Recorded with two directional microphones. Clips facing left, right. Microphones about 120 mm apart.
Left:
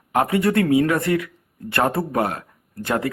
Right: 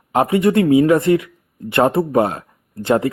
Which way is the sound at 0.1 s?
20° right (ahead or behind).